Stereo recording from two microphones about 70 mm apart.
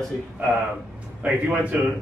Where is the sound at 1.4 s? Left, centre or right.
Right.